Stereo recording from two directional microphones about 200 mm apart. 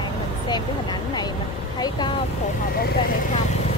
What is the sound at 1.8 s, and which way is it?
Speech, 25° left (ahead or behind).